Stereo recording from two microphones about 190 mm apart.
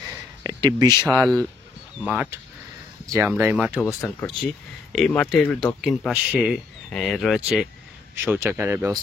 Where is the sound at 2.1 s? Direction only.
10° right (ahead or behind).